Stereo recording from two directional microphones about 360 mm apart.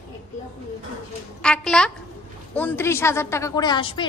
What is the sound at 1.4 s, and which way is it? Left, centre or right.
A woman's voice, centre.